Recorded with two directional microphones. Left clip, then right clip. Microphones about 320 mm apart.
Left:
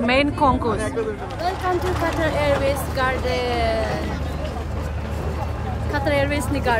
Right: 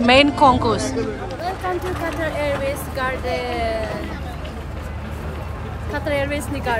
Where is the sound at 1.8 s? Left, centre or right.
Left.